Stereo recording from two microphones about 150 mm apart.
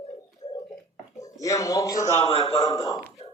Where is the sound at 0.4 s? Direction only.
45° left (ahead or behind).